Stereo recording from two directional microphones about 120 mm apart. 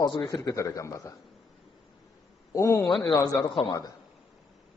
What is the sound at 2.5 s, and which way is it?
Speech, 25° left (ahead or behind).